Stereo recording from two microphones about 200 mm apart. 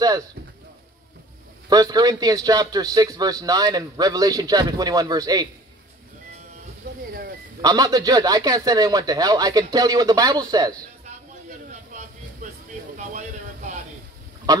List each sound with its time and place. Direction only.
1.7 s a man's voice: 20° right (ahead or behind)
7.6 s a man's voice: 20° right (ahead or behind)
12.9 s a sound: 40° right (ahead or behind)